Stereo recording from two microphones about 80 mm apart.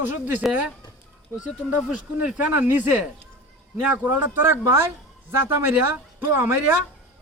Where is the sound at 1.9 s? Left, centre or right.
Centre.